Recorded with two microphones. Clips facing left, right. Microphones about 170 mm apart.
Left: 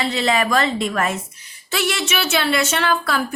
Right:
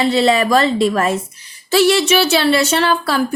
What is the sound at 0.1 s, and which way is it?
A woman's voice, 35° right (ahead or behind).